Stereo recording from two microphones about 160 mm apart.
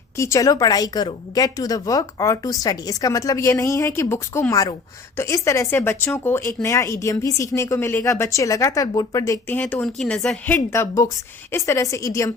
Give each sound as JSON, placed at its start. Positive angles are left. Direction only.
{"t": 0.2, "sound": "a woman's voice", "side_deg": 20}